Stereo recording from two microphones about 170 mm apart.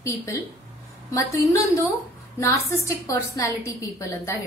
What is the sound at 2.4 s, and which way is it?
A woman's voice, 20° left (ahead or behind).